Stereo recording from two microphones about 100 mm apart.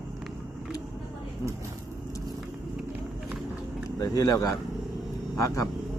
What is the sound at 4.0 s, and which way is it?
Speech, 40° left (ahead or behind).